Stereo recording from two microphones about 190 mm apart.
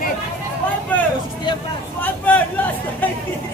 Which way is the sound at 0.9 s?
10° left (ahead or behind).